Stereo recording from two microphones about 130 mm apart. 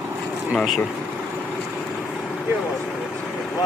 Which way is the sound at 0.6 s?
Centre (ahead or behind).